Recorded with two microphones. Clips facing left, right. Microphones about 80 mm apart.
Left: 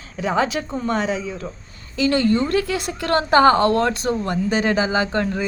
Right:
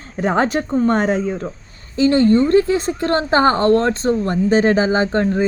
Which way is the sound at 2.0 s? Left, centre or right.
Right.